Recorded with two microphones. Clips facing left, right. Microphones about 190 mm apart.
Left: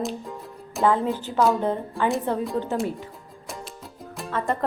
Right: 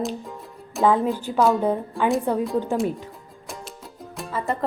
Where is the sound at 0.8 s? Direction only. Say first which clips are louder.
Right 2 dB; 15° right (ahead or behind).